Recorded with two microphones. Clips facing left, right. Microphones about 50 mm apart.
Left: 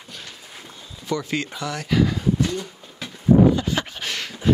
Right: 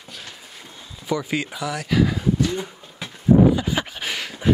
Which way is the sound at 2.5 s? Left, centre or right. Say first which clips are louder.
Right 1 dB; right.